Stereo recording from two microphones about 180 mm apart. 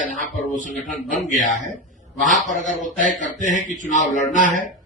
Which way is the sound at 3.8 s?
40° left (ahead or behind).